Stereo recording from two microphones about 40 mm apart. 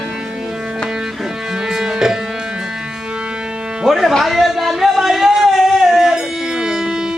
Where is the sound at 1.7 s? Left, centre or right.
Centre.